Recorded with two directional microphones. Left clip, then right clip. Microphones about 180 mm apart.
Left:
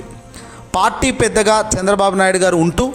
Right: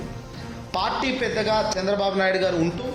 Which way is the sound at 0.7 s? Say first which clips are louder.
Left 9 dB; 40° left (ahead or behind).